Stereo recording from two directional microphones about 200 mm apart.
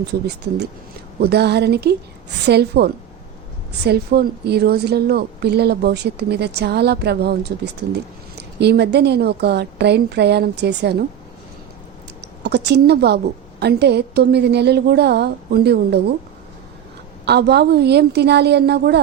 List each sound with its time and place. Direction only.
0.1 s a woman's voice: 55° right (ahead or behind)
12.2 s a woman's voice: 55° right (ahead or behind)
17.2 s a woman's voice: 55° right (ahead or behind)